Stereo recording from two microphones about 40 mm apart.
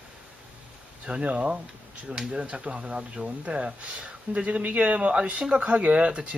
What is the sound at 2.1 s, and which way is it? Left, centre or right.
Speech, centre.